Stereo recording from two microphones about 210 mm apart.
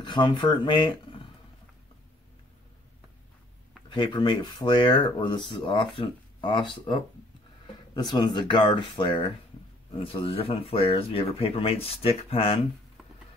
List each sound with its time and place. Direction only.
0.0 s speech: 20° left (ahead or behind)
3.9 s speech: 20° left (ahead or behind)